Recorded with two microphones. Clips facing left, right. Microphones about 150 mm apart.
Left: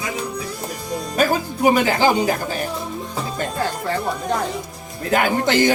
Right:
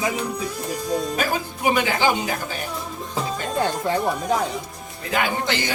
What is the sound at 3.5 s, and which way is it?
Speech, 20° right (ahead or behind).